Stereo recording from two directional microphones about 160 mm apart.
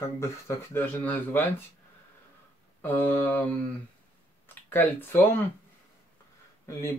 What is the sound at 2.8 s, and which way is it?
Speech, 10° left (ahead or behind).